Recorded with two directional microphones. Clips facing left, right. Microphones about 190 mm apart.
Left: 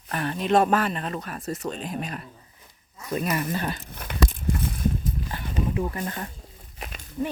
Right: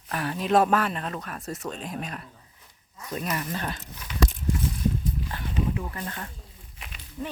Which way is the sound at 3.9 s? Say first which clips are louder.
Left 1 dB; 55° left (ahead or behind).